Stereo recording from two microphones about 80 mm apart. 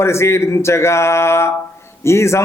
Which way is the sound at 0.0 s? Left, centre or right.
Left.